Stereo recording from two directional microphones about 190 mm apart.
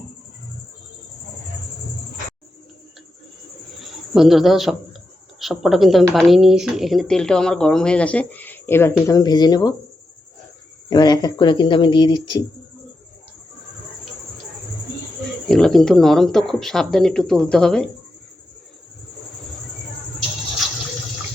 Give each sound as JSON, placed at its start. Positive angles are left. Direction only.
{"t": 4.1, "sound": "speech", "side_deg": 0}
{"t": 10.8, "sound": "speech", "side_deg": 20}
{"t": 15.4, "sound": "speech", "side_deg": 0}